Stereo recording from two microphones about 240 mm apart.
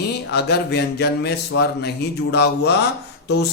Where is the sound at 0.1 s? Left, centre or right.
Left.